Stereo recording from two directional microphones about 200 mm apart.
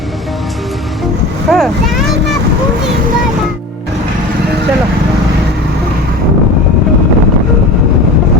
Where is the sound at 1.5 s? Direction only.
Centre (ahead or behind).